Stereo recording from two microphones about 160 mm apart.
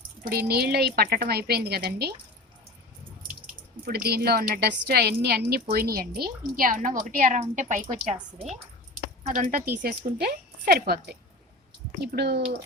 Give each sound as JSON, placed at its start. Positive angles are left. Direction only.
{"t": 0.3, "sound": "speech", "side_deg": -80}
{"t": 3.8, "sound": "a woman's voice", "side_deg": -75}
{"t": 9.2, "sound": "speech", "side_deg": -55}